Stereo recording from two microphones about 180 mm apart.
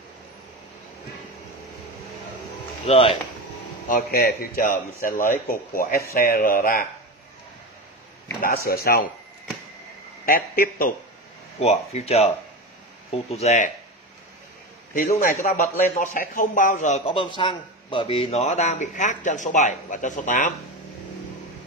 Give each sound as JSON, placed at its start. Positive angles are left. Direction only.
{"t": 2.9, "sound": "speech", "side_deg": 30}
{"t": 3.9, "sound": "a man's voice", "side_deg": 60}
{"t": 8.4, "sound": "a man's voice", "side_deg": 55}
{"t": 10.2, "sound": "a man's voice", "side_deg": 55}
{"t": 11.6, "sound": "speech", "side_deg": 35}
{"t": 15.4, "sound": "a man's voice", "side_deg": 45}